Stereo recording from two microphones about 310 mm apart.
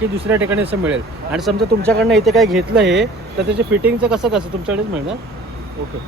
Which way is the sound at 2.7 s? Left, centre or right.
Right.